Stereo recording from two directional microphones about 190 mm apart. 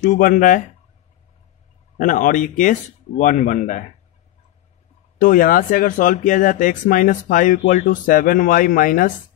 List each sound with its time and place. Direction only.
0.0 s speech: 45° left (ahead or behind)
2.0 s speech: 45° left (ahead or behind)
5.2 s speech: 45° left (ahead or behind)